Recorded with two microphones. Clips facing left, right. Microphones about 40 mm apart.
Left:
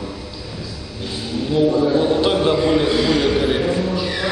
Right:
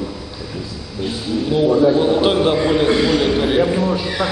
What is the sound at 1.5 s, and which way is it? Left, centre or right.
A man's voice, centre.